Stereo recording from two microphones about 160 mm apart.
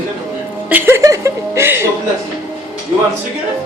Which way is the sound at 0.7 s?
15° right (ahead or behind).